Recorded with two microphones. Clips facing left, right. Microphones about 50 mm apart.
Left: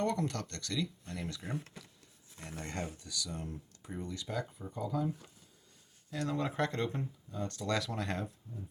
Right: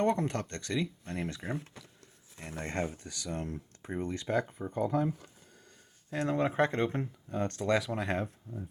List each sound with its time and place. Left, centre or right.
0.0 s speech: right
2.4 s speech: right
6.1 s speech: right
7.0 s speech: right
7.6 s speech: right